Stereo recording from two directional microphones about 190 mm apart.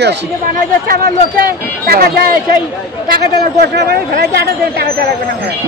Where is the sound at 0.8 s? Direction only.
50° right (ahead or behind).